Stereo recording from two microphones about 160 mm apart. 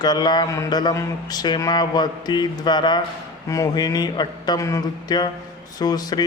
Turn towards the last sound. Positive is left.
turn(degrees=25)  # may be behind; listen again after turning